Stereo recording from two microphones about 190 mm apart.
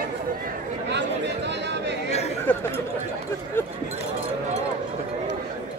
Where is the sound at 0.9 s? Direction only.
65° right (ahead or behind).